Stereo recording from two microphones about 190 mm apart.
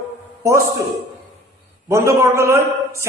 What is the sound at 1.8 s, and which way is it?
A man's voice, 15° right (ahead or behind).